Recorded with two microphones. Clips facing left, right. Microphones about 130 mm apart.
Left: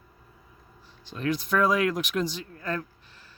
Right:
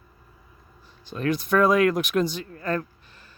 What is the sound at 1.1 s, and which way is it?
Speech, 55° right (ahead or behind).